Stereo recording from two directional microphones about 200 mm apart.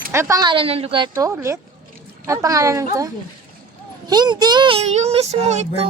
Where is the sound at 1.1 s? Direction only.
15° right (ahead or behind).